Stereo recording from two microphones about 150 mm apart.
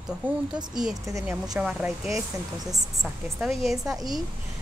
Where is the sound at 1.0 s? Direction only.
20° right (ahead or behind).